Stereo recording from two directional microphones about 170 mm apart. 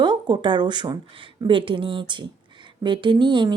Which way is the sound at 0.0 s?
25° right (ahead or behind).